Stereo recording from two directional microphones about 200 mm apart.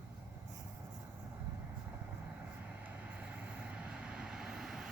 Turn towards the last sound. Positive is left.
turn(degrees=0)  # may be behind; listen again after turning